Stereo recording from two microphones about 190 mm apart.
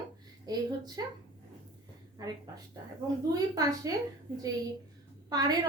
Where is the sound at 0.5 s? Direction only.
20° right (ahead or behind).